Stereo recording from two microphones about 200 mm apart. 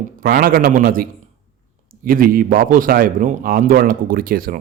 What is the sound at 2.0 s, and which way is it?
A man's voice, 45° right (ahead or behind).